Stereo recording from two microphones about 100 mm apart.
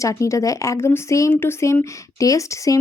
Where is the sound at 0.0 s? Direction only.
30° left (ahead or behind).